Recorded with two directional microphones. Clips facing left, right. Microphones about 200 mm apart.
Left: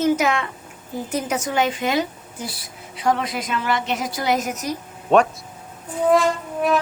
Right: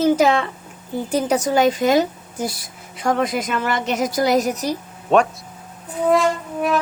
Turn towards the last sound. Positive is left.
turn(degrees=0)  # may be behind; listen again after turning